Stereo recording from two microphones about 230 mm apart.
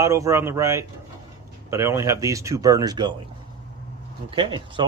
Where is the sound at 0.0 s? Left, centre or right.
Centre.